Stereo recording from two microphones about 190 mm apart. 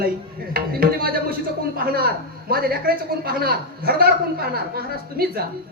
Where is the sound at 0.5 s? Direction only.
55° right (ahead or behind).